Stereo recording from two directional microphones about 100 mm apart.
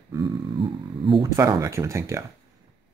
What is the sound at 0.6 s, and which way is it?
Speech, 55° right (ahead or behind).